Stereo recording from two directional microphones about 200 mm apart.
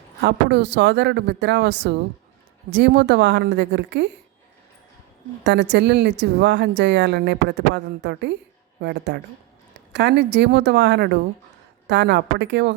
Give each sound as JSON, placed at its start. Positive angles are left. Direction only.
{"t": 0.2, "sound": "speech", "side_deg": -60}
{"t": 5.4, "sound": "speech", "side_deg": -60}